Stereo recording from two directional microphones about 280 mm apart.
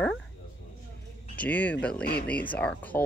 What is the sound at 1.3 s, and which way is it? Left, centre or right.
Speech, centre.